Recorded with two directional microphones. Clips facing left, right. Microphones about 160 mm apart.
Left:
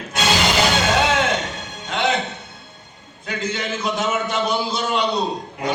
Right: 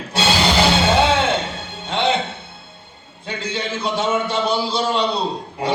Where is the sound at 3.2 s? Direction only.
30° right (ahead or behind).